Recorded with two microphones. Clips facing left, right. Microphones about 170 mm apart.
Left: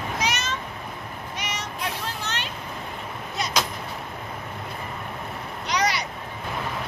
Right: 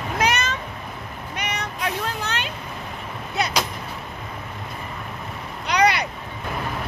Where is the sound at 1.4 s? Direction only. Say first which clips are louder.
Right 4 dB; 60° right (ahead or behind).